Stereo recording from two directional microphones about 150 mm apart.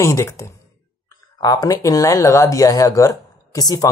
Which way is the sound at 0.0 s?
20° left (ahead or behind).